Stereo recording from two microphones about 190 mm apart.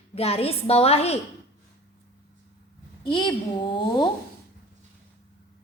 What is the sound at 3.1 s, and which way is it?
A woman's voice, 25° left (ahead or behind).